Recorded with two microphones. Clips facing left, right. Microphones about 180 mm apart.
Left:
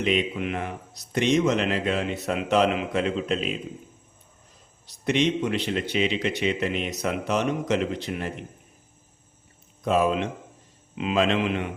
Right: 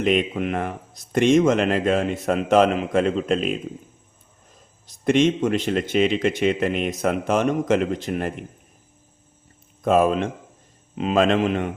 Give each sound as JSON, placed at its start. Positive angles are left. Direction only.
{"t": 0.0, "sound": "a man's voice", "side_deg": -50}
{"t": 5.0, "sound": "a man's voice", "side_deg": -45}
{"t": 9.8, "sound": "a man's voice", "side_deg": -50}